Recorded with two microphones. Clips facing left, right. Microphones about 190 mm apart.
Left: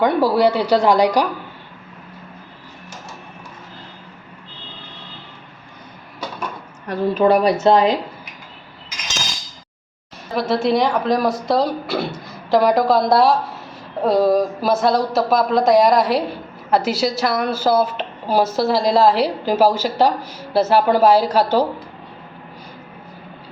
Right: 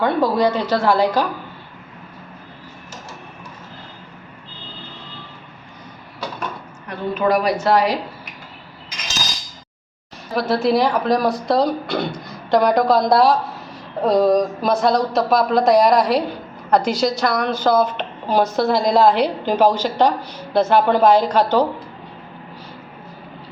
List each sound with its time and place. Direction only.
0.0 s speech: 10° left (ahead or behind)
6.8 s a woman's voice: 35° left (ahead or behind)
10.3 s a woman's voice: centre (ahead or behind)